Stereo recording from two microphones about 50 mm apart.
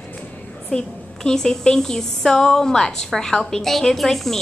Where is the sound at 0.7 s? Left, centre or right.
Centre.